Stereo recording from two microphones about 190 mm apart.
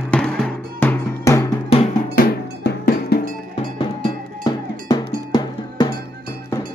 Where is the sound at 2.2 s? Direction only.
50° left (ahead or behind).